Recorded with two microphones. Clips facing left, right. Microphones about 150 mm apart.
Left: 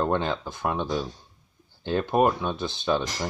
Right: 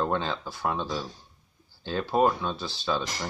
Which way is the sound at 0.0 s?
20° left (ahead or behind).